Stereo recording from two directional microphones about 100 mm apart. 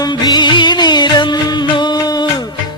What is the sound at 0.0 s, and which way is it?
Music, 45° left (ahead or behind).